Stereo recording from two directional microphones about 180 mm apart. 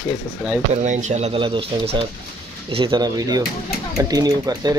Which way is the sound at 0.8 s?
40° right (ahead or behind).